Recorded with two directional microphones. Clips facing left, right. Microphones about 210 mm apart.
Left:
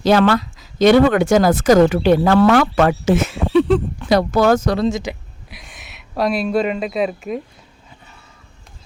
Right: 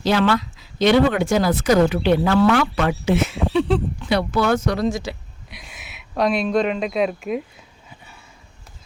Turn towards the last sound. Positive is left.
turn(degrees=0)  # may be behind; listen again after turning